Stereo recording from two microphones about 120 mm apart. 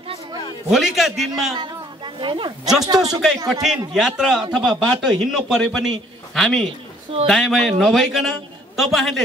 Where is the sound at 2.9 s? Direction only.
30° right (ahead or behind).